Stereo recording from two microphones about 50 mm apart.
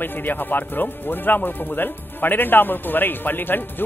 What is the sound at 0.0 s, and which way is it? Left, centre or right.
Speech, left.